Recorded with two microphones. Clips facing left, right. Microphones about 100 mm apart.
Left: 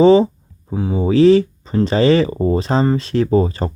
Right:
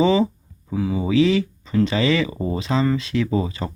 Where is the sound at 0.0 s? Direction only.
35° left (ahead or behind).